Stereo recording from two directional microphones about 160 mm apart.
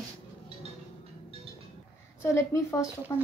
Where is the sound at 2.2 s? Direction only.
20° left (ahead or behind).